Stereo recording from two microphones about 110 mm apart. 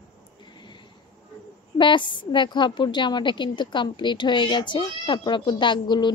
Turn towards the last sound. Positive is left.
turn(degrees=45)  # may be behind; listen again after turning